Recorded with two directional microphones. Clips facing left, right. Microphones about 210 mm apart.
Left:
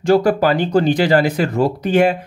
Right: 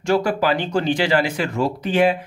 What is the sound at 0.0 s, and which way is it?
Speech, 35° left (ahead or behind).